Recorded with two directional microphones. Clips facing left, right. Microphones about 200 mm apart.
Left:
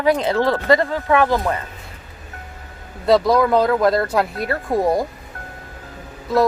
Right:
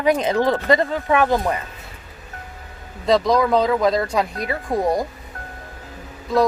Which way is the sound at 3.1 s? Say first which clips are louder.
Left 2 dB; 5° left (ahead or behind).